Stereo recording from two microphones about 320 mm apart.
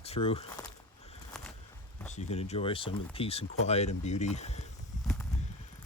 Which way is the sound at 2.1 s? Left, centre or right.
Left.